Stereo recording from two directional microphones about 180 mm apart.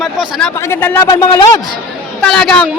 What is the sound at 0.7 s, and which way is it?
Speech, 15° left (ahead or behind).